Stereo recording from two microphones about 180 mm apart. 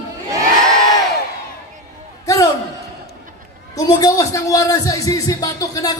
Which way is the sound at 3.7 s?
20° left (ahead or behind).